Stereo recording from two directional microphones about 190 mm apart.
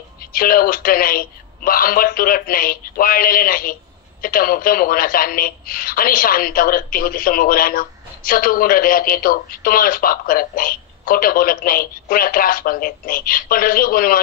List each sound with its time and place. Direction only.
0.2 s speech: 50° left (ahead or behind)